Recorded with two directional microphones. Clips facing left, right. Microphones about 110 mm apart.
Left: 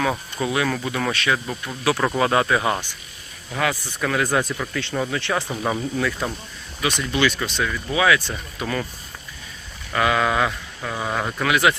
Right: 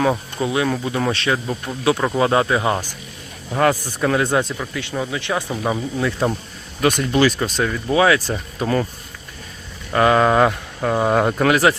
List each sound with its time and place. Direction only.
0.1 s speech: 20° right (ahead or behind)
3.6 s speech: 45° right (ahead or behind)
4.0 s speech: 25° right (ahead or behind)
4.5 s speech: 10° right (ahead or behind)
6.0 s speech: 25° right (ahead or behind)
6.8 s speech: 45° right (ahead or behind)
9.9 s speech: 35° right (ahead or behind)